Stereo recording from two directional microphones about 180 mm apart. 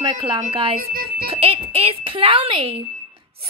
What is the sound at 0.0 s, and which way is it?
A woman's voice, 25° right (ahead or behind).